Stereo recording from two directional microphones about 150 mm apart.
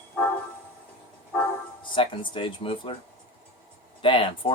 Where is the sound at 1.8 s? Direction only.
35° left (ahead or behind).